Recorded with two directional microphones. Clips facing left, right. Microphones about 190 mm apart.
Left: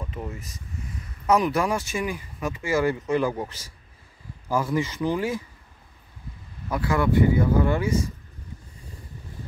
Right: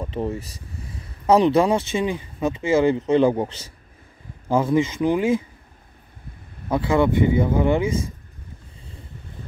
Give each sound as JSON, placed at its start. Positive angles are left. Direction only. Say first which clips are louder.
{"t": 0.0, "sound": "speech", "louder": "right 8 dB", "side_deg": -30}
{"t": 6.7, "sound": "speech", "louder": "right 4 dB", "side_deg": -25}